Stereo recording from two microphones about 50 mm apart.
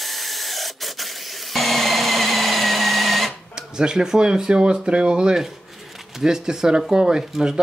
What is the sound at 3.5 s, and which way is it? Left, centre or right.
Speech, centre.